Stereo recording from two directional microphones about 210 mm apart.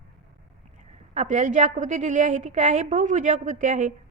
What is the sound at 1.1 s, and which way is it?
A woman's voice, 35° right (ahead or behind).